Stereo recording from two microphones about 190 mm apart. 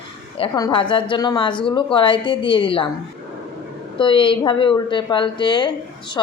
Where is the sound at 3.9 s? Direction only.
25° left (ahead or behind).